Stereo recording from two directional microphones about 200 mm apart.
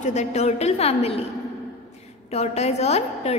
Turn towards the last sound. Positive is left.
turn(degrees=30)  # may be behind; listen again after turning